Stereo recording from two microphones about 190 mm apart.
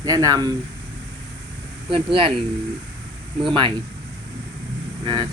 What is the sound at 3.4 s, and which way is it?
Speech, 25° right (ahead or behind).